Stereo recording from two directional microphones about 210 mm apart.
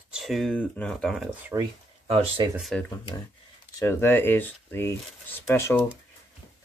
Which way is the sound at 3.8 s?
10° left (ahead or behind).